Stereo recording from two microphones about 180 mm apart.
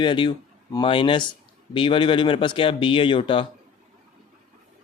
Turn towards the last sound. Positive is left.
turn(degrees=30)  # may be behind; listen again after turning